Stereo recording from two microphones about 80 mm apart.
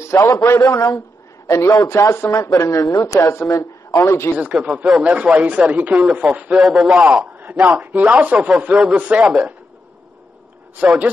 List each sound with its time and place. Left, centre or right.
0.2 s a man's voice: left
4.4 s a man's voice: centre
10.8 s a man's voice: centre